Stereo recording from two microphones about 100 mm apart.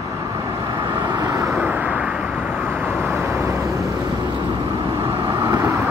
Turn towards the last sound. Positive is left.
turn(degrees=-30)  # may be behind; listen again after turning